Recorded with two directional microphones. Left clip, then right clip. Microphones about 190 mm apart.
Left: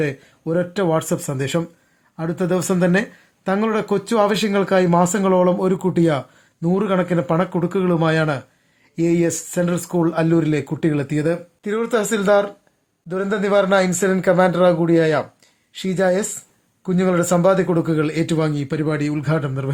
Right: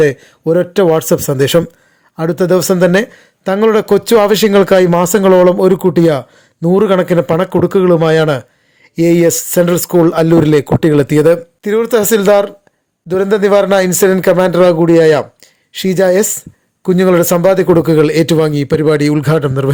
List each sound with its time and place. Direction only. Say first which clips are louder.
0.0 s speech: right 12 dB; 40° right (ahead or behind)